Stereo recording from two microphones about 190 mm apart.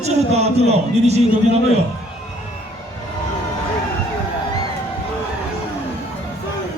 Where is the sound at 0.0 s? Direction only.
35° right (ahead or behind).